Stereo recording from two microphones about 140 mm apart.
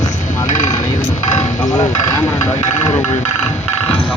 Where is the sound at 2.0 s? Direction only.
20° left (ahead or behind).